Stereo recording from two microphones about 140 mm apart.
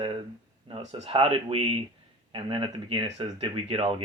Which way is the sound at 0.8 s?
55° right (ahead or behind).